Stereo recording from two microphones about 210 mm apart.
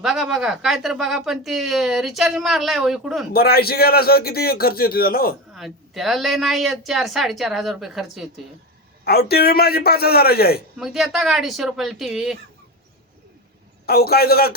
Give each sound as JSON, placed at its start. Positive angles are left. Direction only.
{"t": 0.0, "sound": "speech", "side_deg": 0}
{"t": 3.3, "sound": "a man's voice", "side_deg": 45}
{"t": 5.5, "sound": "speech", "side_deg": 0}
{"t": 9.0, "sound": "a man's voice", "side_deg": 50}
{"t": 10.8, "sound": "speech", "side_deg": 0}
{"t": 13.8, "sound": "a man's voice", "side_deg": 50}